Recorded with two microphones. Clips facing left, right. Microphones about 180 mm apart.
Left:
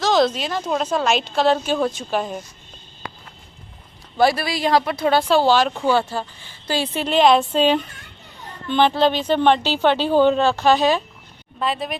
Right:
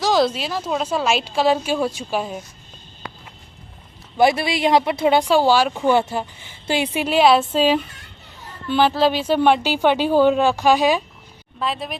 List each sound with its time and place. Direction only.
0.0 s a woman's voice: 10° right (ahead or behind)
4.2 s speech: 20° right (ahead or behind)
5.8 s a woman's voice: 20° right (ahead or behind)
11.6 s speech: centre (ahead or behind)